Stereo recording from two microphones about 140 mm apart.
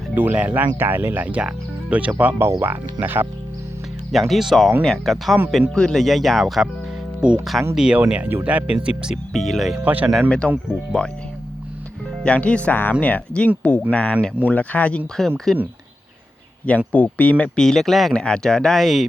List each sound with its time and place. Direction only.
0.2 s speech: 10° right (ahead or behind)
4.1 s speech: centre (ahead or behind)
9.8 s speech: 10° right (ahead or behind)
10.1 s speech: 5° left (ahead or behind)
12.2 s speech: 10° left (ahead or behind)
16.6 s speech: 10° left (ahead or behind)